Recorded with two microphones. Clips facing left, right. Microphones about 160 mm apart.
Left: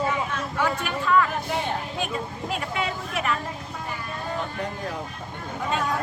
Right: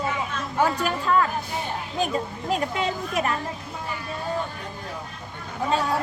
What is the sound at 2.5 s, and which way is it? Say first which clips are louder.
Speech: right 4 dB; 40° right (ahead or behind).